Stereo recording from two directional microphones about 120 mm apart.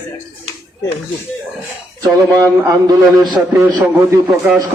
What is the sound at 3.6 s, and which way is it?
Speech, 25° right (ahead or behind).